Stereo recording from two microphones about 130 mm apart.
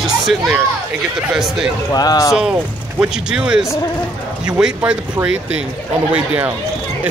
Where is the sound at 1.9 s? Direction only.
30° left (ahead or behind).